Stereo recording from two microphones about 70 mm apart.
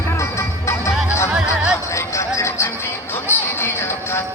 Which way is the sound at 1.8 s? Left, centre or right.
Left.